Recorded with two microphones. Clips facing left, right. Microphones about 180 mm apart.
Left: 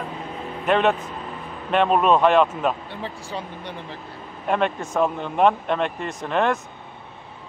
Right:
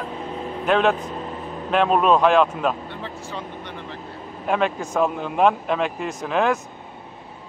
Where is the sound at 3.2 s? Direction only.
10° left (ahead or behind).